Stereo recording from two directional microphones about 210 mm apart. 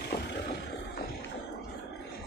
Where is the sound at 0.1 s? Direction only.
30° left (ahead or behind).